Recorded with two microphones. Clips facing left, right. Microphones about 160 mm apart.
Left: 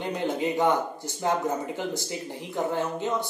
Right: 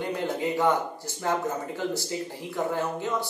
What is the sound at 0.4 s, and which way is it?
Speech, 20° left (ahead or behind).